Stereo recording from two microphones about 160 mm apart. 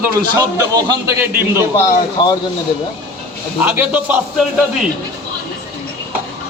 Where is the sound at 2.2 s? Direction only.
30° left (ahead or behind).